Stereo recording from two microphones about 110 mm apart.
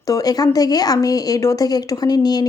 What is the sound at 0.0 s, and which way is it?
A woman's voice, 35° left (ahead or behind).